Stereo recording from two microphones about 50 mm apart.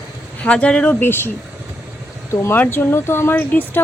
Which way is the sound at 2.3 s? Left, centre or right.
Left.